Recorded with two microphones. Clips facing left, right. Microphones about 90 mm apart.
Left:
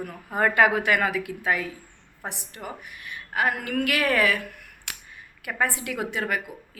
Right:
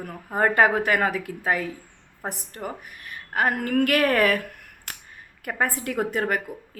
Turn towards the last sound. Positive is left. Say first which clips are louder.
# right 3 dB
turn(degrees=-45)  # may be behind; listen again after turning